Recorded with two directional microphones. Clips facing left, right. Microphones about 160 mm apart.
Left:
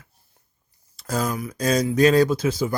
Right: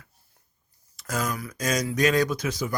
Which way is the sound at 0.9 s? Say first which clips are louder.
Left 4 dB; 30° left (ahead or behind).